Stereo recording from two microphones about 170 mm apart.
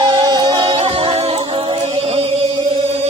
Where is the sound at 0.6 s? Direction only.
35° right (ahead or behind).